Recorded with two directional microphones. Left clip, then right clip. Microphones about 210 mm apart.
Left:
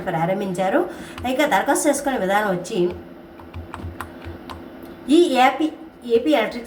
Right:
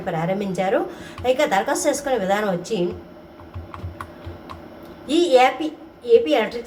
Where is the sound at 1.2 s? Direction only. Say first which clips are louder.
Even; centre (ahead or behind).